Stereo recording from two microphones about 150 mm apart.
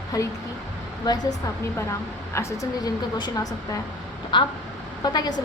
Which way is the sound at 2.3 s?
20° left (ahead or behind).